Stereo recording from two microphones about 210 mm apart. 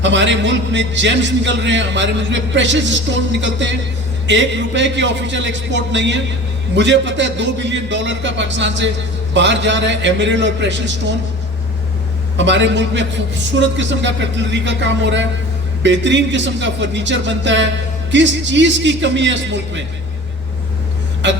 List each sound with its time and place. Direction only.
0.0 s a man's voice: 60° right (ahead or behind)
12.4 s a man's voice: 60° right (ahead or behind)
21.2 s a man's voice: 60° right (ahead or behind)